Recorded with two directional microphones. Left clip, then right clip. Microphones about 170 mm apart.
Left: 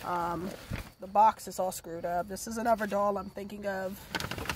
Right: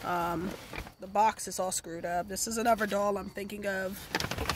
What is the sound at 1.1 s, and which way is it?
Speech, 5° left (ahead or behind).